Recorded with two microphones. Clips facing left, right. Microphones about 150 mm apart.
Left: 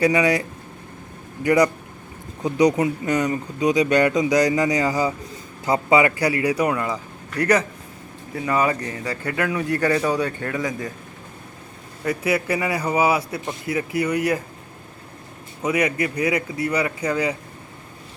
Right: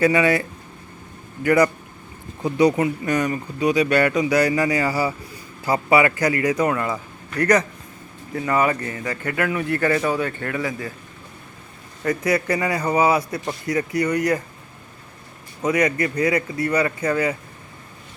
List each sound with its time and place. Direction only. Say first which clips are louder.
0.0 s speech: right 1 dB; 15° left (ahead or behind)
1.5 s speech: even; 15° left (ahead or behind)
12.0 s speech: right 1 dB; 10° left (ahead or behind)
15.6 s speech: right 1 dB; 10° left (ahead or behind)